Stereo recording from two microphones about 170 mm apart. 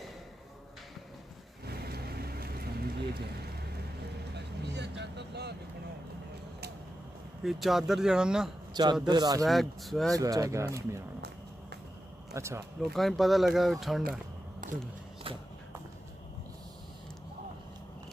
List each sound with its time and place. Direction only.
1.7 s vehicle: 65° right (ahead or behind)
7.4 s speech: centre (ahead or behind)
9.0 s speech: 25° right (ahead or behind)
9.4 s speech: centre (ahead or behind)
10.1 s speech: 20° right (ahead or behind)
12.4 s speech: 15° right (ahead or behind)
12.9 s speech: centre (ahead or behind)
14.6 s a sound: 50° right (ahead or behind)
15.3 s a sound: 30° right (ahead or behind)